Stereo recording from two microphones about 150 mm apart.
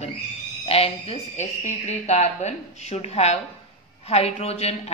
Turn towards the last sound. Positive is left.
turn(degrees=45)  # may be behind; listen again after turning